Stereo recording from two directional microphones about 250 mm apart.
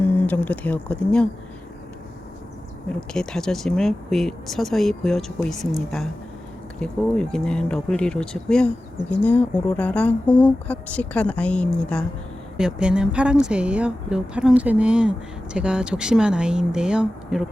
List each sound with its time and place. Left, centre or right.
0.0 s speech: centre
3.1 s speech: centre